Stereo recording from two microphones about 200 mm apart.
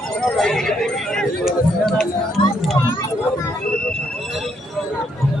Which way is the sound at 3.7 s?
5° left (ahead or behind).